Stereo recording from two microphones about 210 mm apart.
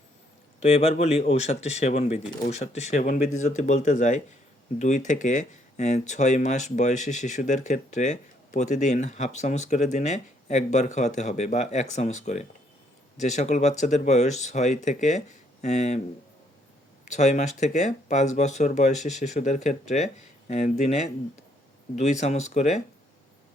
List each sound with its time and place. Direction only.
0.6 s speech: 30° left (ahead or behind)
17.1 s speech: 35° left (ahead or behind)